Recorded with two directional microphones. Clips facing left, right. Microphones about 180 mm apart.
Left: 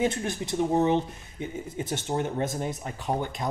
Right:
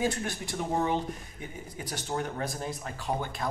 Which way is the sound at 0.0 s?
20° left (ahead or behind).